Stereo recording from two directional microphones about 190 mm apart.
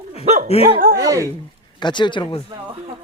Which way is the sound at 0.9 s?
15° right (ahead or behind).